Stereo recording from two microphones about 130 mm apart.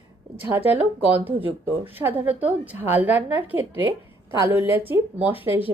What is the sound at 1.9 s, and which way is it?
A woman's voice, 15° right (ahead or behind).